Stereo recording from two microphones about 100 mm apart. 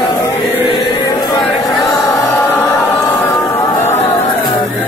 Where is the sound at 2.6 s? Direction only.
35° left (ahead or behind).